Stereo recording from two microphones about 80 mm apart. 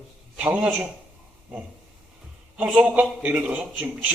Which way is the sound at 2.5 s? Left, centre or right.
Centre.